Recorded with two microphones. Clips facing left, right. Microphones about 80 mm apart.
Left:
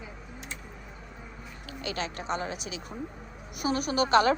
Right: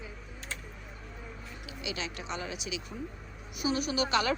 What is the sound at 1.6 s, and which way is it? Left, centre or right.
A woman's voice, left.